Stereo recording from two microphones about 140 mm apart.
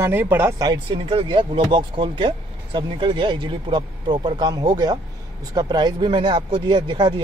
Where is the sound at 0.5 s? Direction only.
30° right (ahead or behind).